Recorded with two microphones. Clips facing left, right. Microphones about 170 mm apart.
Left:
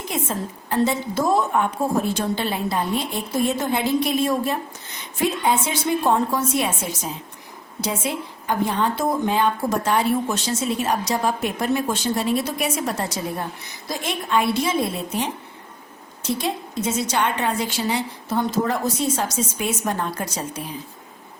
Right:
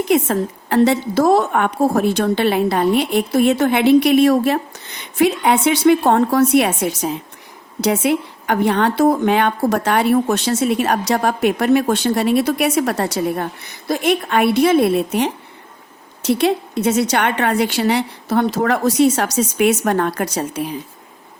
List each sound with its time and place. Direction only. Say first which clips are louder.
0.1 s a woman's voice: right 9 dB; 70° right (ahead or behind)